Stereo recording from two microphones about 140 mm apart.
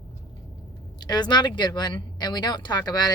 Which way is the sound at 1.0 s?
30° left (ahead or behind).